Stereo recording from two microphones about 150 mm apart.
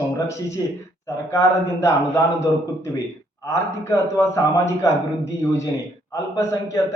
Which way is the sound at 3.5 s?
20° left (ahead or behind).